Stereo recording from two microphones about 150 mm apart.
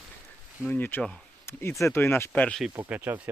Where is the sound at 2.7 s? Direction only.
10° right (ahead or behind).